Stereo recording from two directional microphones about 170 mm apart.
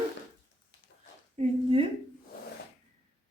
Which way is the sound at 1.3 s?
35° right (ahead or behind).